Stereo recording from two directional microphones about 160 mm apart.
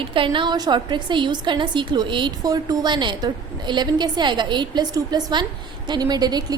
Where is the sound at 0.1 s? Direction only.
30° right (ahead or behind).